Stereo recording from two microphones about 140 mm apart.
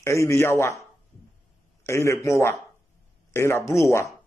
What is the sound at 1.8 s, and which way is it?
A man's voice, 20° left (ahead or behind).